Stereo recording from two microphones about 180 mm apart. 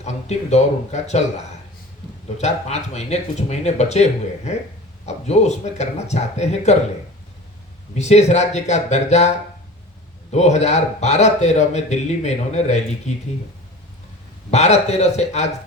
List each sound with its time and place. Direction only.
0.0 s speech: 40° left (ahead or behind)
2.4 s speech: 40° left (ahead or behind)
7.9 s speech: 40° left (ahead or behind)
10.3 s speech: 40° left (ahead or behind)
14.5 s speech: 35° left (ahead or behind)